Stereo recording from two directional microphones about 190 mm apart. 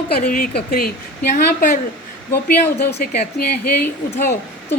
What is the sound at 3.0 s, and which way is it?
Speech, 50° left (ahead or behind).